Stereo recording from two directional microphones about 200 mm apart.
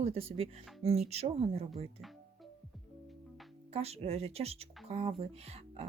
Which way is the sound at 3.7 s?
30° right (ahead or behind).